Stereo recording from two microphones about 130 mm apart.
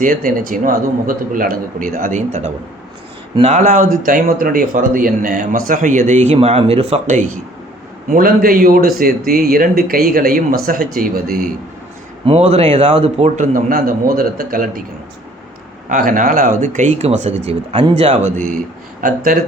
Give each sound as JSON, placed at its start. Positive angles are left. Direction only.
{"t": 0.0, "sound": "speech", "side_deg": -90}
{"t": 8.1, "sound": "speech", "side_deg": -90}
{"t": 12.2, "sound": "a man's voice", "side_deg": -55}
{"t": 15.9, "sound": "a man's voice", "side_deg": -90}